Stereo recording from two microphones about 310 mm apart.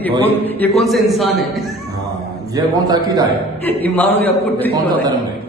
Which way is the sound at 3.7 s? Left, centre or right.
Centre.